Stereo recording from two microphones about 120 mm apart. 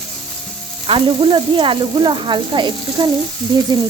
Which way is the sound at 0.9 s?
45° right (ahead or behind).